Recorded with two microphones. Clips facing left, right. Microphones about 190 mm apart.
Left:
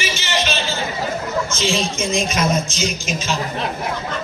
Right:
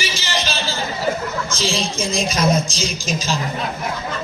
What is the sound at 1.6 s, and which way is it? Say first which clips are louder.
A man's voice: right 1 dB; 35° right (ahead or behind).